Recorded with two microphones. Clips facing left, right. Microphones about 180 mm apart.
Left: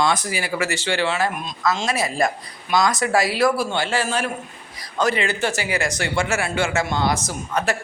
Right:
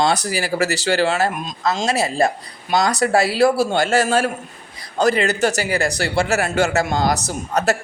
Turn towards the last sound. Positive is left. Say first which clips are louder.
# right 4 dB
turn(degrees=-40)  # may be behind; listen again after turning